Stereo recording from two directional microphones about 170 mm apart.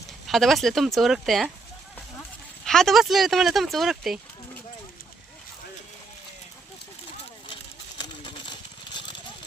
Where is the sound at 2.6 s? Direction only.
Centre (ahead or behind).